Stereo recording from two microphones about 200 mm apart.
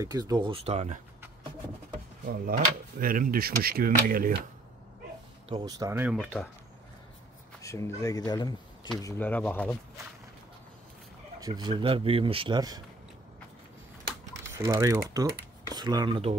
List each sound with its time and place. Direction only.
0.0 s speech: 20° right (ahead or behind)
2.2 s speech: 45° right (ahead or behind)
5.5 s speech: 20° right (ahead or behind)
6.1 s speech: 5° left (ahead or behind)
7.6 s speech: 15° left (ahead or behind)
11.4 s speech: 20° right (ahead or behind)
14.5 s speech: 15° right (ahead or behind)